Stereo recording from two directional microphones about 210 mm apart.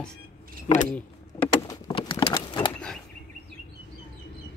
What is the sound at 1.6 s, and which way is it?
Patter, 20° left (ahead or behind).